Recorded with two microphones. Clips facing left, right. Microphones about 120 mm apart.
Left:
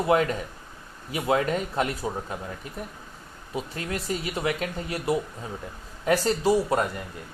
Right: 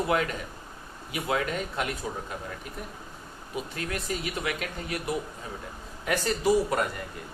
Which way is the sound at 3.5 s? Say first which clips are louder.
Left 2 dB; 25° left (ahead or behind).